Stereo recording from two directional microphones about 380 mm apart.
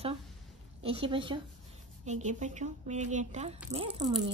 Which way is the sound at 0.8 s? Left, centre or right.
Centre.